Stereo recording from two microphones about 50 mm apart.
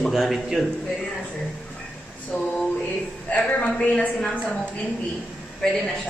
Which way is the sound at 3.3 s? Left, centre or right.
Left.